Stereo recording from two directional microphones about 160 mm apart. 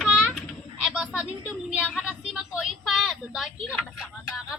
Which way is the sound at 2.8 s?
Centre (ahead or behind).